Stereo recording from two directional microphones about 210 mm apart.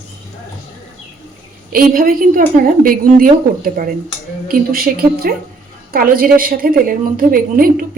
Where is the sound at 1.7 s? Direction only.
45° right (ahead or behind).